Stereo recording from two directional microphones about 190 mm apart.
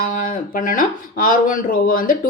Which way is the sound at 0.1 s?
45° left (ahead or behind).